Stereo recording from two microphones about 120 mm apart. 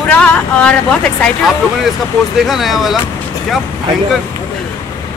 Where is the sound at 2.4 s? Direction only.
Centre (ahead or behind).